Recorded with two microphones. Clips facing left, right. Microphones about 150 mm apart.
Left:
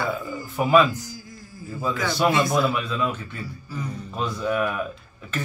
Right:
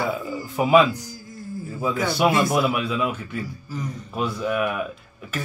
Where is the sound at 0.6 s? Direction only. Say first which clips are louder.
Right 1 dB; 15° right (ahead or behind).